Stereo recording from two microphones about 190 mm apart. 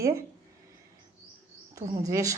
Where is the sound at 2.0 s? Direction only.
15° right (ahead or behind).